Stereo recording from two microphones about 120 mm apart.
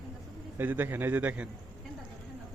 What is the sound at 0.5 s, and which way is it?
Speech, 15° right (ahead or behind).